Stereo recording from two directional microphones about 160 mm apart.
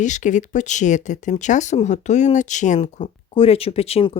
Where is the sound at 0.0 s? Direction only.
50° left (ahead or behind).